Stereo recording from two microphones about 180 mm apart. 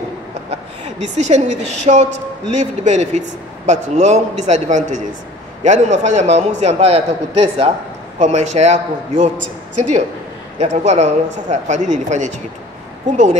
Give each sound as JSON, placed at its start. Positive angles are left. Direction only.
{"t": 1.0, "sound": "a woman's voice", "side_deg": -40}